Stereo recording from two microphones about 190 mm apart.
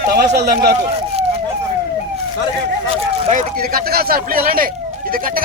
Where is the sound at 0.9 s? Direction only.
30° right (ahead or behind).